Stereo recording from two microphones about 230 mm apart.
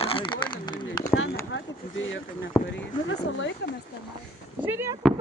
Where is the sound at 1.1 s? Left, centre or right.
Left.